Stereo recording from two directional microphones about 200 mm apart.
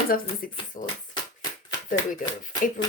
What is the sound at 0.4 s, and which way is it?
Speech, 45° left (ahead or behind).